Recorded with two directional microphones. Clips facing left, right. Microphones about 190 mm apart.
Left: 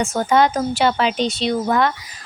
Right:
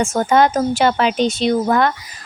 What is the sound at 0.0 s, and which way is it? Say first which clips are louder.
Speech: right 2 dB; 50° right (ahead or behind).